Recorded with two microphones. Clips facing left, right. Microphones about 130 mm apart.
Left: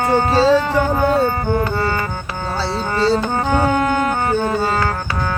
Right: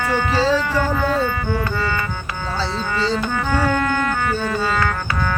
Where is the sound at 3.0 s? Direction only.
35° left (ahead or behind).